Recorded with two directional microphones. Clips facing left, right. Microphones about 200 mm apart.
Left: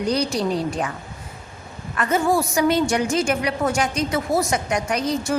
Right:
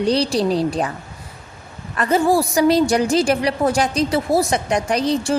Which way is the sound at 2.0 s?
35° right (ahead or behind).